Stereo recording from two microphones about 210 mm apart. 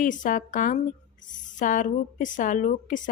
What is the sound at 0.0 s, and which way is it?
A woman's voice, 40° left (ahead or behind).